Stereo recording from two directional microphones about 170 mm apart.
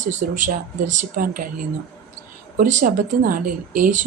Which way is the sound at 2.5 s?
50° right (ahead or behind).